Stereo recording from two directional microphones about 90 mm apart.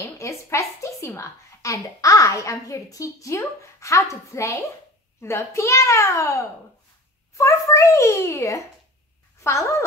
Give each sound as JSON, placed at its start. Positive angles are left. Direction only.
{"t": 0.2, "sound": "a woman's voice", "side_deg": 35}